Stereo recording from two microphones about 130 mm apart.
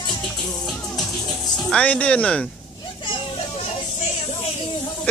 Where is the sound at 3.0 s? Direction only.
40° left (ahead or behind).